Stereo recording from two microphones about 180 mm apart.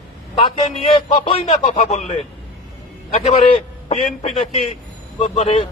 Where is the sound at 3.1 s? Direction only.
40° left (ahead or behind).